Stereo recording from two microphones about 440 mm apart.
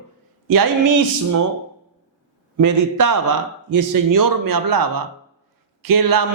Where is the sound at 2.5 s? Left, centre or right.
Right.